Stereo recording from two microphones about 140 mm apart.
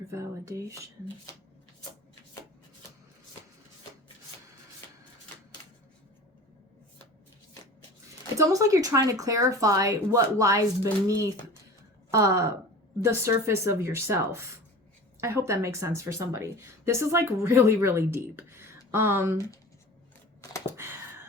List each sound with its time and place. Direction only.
0.1 s speech: 20° right (ahead or behind)
8.4 s speech: 25° right (ahead or behind)